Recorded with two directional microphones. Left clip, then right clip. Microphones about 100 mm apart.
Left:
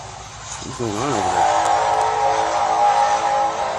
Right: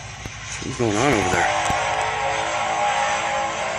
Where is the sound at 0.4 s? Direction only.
75° left (ahead or behind).